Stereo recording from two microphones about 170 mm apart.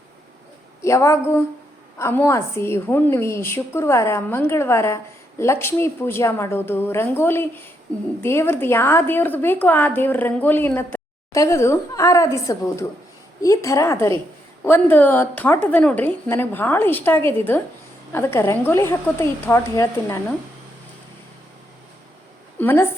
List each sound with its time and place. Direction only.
0.8 s a woman's voice: 15° left (ahead or behind)
22.5 s a woman's voice: 10° left (ahead or behind)